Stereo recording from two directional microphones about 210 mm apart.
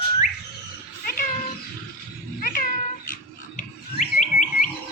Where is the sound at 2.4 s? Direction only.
40° left (ahead or behind).